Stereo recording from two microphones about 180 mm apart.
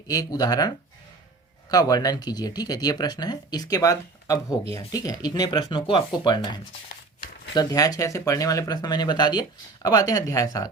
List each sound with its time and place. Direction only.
0.1 s speech: 20° left (ahead or behind)
1.7 s speech: 20° left (ahead or behind)